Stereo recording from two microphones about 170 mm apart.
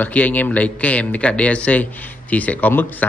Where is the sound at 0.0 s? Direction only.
10° left (ahead or behind).